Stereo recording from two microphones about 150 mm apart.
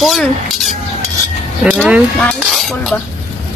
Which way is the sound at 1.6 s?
10° right (ahead or behind).